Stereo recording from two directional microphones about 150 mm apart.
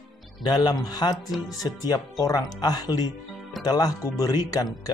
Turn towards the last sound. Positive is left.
turn(degrees=25)  # may be behind; listen again after turning